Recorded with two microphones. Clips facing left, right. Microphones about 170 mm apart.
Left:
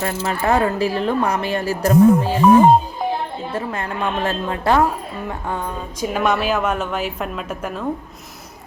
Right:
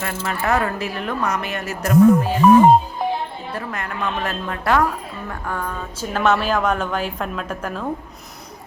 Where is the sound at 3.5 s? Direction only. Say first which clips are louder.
Left 3 dB; 25° left (ahead or behind).